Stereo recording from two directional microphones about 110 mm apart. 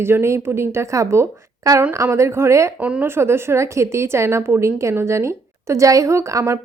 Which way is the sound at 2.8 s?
10° right (ahead or behind).